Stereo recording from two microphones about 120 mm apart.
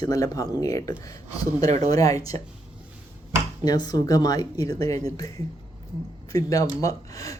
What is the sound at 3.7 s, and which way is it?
Speech, 35° left (ahead or behind).